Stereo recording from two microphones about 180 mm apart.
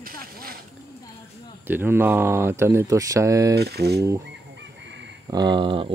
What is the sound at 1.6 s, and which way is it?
Speech, 10° right (ahead or behind).